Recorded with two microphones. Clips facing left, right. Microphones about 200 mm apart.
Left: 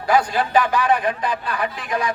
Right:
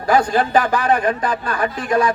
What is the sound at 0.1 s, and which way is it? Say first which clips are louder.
A man's voice: right 3 dB; 45° right (ahead or behind).